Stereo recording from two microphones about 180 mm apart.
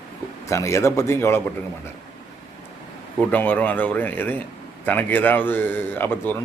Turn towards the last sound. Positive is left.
turn(degrees=10)  # may be behind; listen again after turning